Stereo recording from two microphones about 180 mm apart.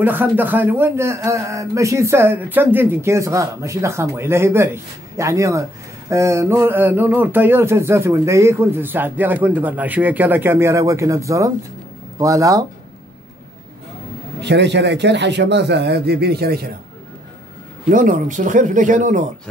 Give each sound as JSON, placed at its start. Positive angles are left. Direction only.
{"t": 0.0, "sound": "speech", "side_deg": -10}
{"t": 14.4, "sound": "a man's voice", "side_deg": -70}
{"t": 17.8, "sound": "speech", "side_deg": -45}